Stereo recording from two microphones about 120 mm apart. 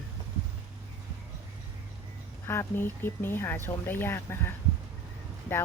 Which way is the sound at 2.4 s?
20° left (ahead or behind).